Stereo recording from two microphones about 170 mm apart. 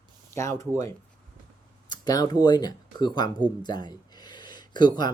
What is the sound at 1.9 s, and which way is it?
Speech, 25° left (ahead or behind).